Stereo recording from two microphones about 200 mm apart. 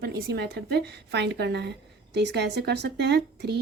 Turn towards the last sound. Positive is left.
turn(degrees=-55)  # may be behind; listen again after turning